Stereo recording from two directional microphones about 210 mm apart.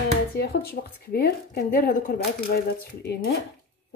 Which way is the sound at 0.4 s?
50° left (ahead or behind).